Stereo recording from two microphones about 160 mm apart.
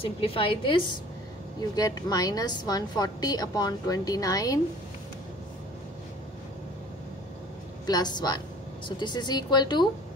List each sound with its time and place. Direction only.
0.2 s a woman's voice: 35° left (ahead or behind)
7.8 s a woman's voice: 25° left (ahead or behind)